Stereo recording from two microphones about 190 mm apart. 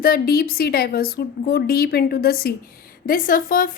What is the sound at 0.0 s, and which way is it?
A woman's voice, 50° left (ahead or behind).